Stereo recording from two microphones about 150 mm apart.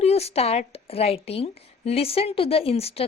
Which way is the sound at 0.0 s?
45° left (ahead or behind).